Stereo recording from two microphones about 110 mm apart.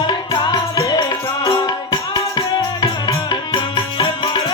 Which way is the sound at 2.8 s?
40° left (ahead or behind).